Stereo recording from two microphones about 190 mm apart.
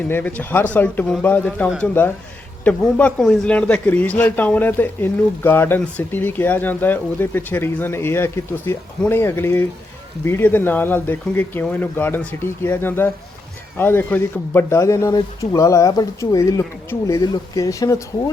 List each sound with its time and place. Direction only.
0.1 s a man's voice: 10° left (ahead or behind)